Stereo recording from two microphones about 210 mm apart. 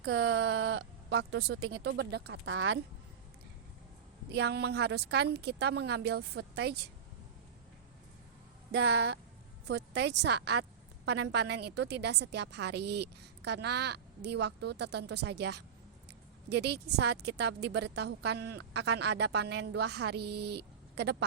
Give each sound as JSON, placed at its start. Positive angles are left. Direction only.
{"t": 0.0, "sound": "speech", "side_deg": -75}
{"t": 1.6, "sound": "speech", "side_deg": -60}
{"t": 4.3, "sound": "a woman's voice", "side_deg": -55}
{"t": 8.7, "sound": "a woman's voice", "side_deg": -55}